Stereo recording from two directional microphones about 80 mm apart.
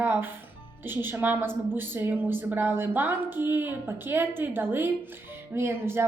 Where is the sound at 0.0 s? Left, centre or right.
Right.